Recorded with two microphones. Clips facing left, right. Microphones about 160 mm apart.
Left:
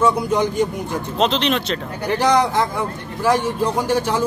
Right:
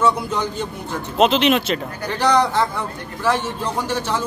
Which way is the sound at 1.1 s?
5° right (ahead or behind).